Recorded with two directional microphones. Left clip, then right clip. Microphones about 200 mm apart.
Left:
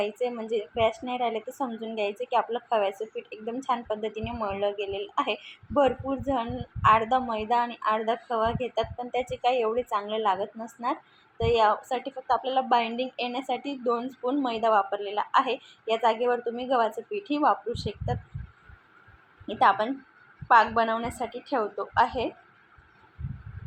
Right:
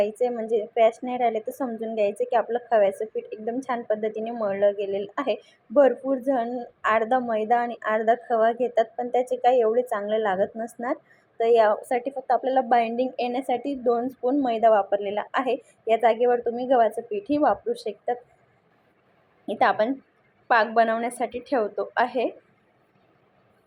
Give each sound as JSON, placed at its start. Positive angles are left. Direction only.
{"t": 0.0, "sound": "a woman's voice", "side_deg": -20}
{"t": 19.5, "sound": "a woman's voice", "side_deg": -20}